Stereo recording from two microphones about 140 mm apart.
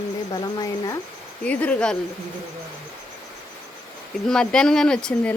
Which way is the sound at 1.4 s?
10° left (ahead or behind).